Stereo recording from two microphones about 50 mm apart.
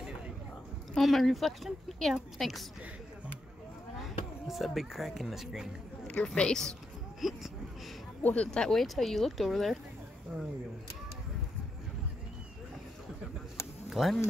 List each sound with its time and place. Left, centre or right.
1.0 s speech: centre
4.0 s speech: centre
6.0 s a woman's voice: centre
7.2 s speech: centre
8.2 s speech: left
8.5 s speech: centre
10.3 s speech: right
13.8 s speech: centre